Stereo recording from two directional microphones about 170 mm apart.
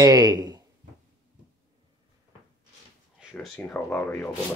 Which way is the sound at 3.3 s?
5° left (ahead or behind).